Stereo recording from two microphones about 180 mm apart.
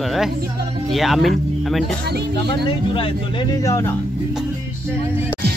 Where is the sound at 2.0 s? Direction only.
65° right (ahead or behind).